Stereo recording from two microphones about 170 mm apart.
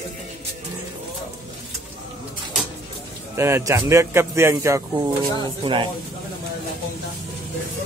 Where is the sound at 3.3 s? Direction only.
15° right (ahead or behind).